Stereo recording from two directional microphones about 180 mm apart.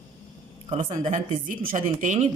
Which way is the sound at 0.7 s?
35° right (ahead or behind).